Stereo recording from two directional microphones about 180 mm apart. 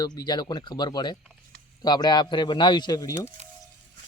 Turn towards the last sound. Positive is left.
turn(degrees=15)  # may be behind; listen again after turning